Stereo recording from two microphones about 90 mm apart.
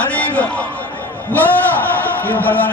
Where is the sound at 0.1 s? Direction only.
15° left (ahead or behind).